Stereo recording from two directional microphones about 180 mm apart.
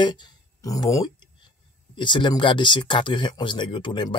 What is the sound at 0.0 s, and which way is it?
Speech, 25° left (ahead or behind).